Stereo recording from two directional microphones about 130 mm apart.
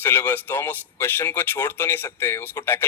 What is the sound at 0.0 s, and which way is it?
Speech, 15° left (ahead or behind).